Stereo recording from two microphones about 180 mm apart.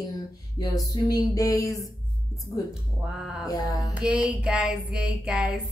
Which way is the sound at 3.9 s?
5° right (ahead or behind).